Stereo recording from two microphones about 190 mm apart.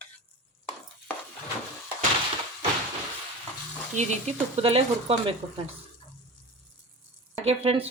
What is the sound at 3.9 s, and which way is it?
Speech, 35° right (ahead or behind).